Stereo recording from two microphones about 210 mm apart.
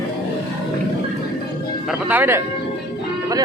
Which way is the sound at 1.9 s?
10° right (ahead or behind).